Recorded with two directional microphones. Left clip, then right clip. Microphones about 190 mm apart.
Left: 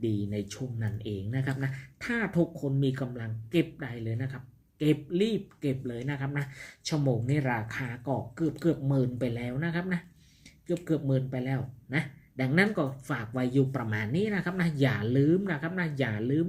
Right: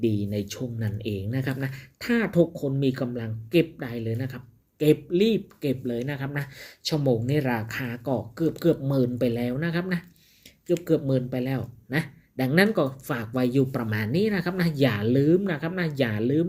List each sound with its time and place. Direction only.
0.2 s speech: 35° right (ahead or behind)